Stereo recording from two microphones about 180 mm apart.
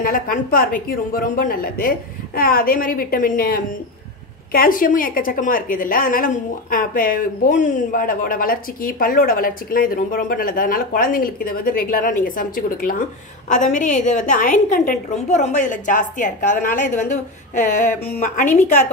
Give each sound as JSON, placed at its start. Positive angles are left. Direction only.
{"t": 0.0, "sound": "a woman's voice", "side_deg": 50}
{"t": 18.0, "sound": "speech", "side_deg": 60}
{"t": 18.4, "sound": "a woman's voice", "side_deg": 40}